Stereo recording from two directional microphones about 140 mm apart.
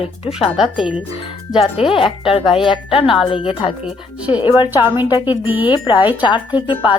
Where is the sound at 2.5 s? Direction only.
40° left (ahead or behind).